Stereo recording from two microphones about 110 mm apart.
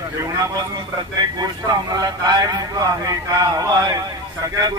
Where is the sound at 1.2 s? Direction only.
40° right (ahead or behind).